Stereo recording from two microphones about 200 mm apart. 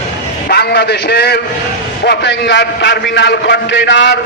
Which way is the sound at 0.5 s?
50° left (ahead or behind).